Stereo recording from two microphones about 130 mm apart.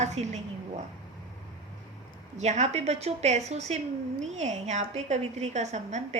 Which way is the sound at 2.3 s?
60° right (ahead or behind).